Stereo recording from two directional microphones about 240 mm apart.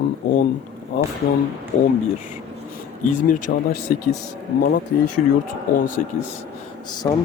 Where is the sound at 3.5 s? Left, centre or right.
Left.